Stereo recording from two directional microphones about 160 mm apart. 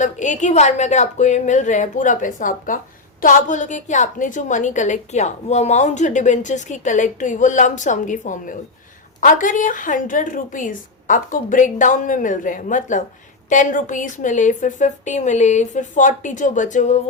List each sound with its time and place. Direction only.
0.0 s a woman's voice: 50° left (ahead or behind)